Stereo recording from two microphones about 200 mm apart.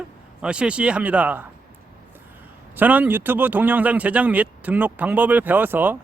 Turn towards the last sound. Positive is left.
turn(degrees=-10)  # may be behind; listen again after turning